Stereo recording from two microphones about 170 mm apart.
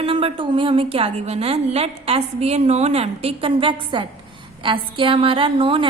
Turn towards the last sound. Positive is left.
turn(degrees=-30)  # may be behind; listen again after turning